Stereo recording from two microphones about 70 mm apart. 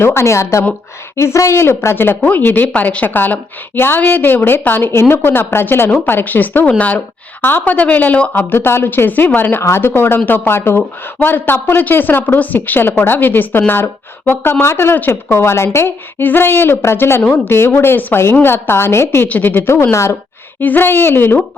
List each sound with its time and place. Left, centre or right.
0.0 s a woman's voice: left
19.3 s a woman's voice: left
20.6 s a woman's voice: left